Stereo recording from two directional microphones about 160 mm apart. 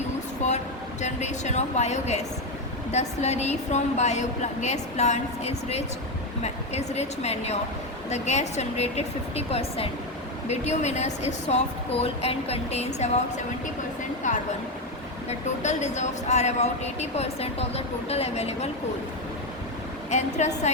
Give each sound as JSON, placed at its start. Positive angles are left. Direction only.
{"t": 1.0, "sound": "speech", "side_deg": 45}
{"t": 20.1, "sound": "speech", "side_deg": 45}